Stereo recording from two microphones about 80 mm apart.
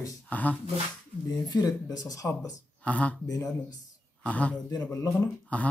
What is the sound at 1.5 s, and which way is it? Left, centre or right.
Speech, left.